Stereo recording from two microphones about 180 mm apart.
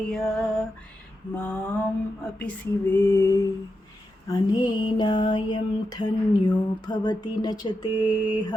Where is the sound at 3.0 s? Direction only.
15° left (ahead or behind).